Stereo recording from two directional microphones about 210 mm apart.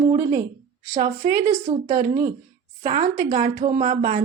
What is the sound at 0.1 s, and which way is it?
Speech, 15° right (ahead or behind).